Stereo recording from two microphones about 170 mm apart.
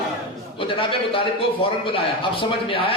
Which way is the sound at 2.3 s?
30° left (ahead or behind).